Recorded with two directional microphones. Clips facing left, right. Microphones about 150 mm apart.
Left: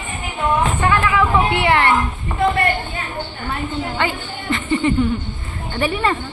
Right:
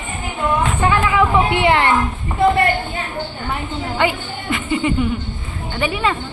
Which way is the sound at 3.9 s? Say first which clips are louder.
Right 3 dB; 10° right (ahead or behind).